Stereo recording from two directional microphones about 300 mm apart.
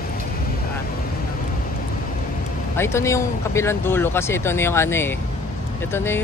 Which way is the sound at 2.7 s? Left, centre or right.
Centre.